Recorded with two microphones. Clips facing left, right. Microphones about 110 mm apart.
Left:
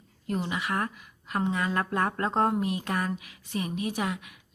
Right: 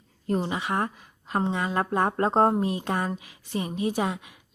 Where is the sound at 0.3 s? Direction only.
30° right (ahead or behind).